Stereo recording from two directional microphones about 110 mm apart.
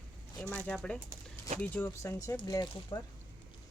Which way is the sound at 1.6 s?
20° left (ahead or behind).